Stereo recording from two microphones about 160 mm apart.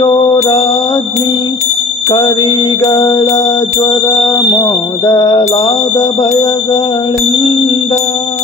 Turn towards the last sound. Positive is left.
turn(degrees=25)  # may be behind; listen again after turning